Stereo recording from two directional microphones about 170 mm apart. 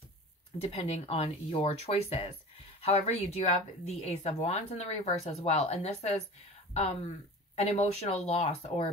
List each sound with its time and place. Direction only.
0.6 s speech: 35° left (ahead or behind)